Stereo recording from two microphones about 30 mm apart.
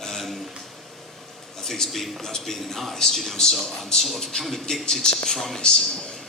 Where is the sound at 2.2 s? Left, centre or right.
Centre.